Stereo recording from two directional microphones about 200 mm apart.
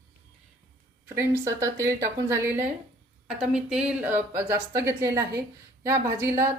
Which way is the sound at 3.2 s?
Centre (ahead or behind).